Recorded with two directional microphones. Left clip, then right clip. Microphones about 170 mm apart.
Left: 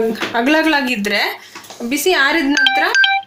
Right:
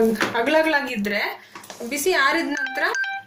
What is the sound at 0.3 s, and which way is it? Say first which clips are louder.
Speech: left 6 dB; 50° left (ahead or behind).